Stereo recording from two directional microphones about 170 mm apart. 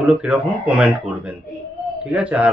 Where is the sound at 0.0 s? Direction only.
5° right (ahead or behind).